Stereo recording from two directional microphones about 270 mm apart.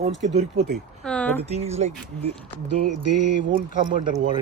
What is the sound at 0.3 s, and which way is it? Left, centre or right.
Speech, right.